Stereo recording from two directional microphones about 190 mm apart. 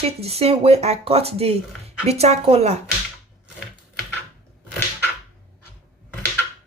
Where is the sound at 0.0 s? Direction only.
30° right (ahead or behind).